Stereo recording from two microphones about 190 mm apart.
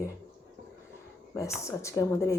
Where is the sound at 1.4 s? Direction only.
15° left (ahead or behind).